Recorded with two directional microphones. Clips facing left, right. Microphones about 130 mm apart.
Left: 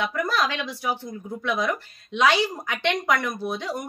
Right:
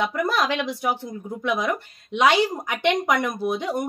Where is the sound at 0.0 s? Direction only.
20° right (ahead or behind).